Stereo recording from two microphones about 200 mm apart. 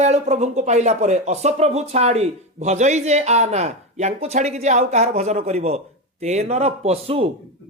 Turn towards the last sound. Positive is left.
turn(degrees=-30)  # may be behind; listen again after turning